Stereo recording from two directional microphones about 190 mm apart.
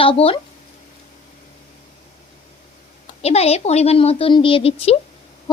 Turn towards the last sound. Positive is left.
turn(degrees=30)  # may be behind; listen again after turning